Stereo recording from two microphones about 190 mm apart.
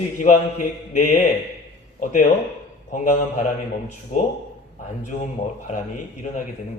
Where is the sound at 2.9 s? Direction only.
40° left (ahead or behind).